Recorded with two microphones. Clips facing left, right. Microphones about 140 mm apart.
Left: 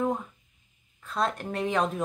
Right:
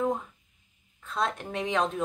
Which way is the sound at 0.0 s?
5° left (ahead or behind).